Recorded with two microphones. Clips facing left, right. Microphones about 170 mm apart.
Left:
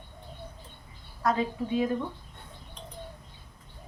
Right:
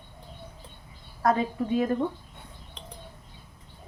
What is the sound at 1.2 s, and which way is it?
Speech, 50° right (ahead or behind).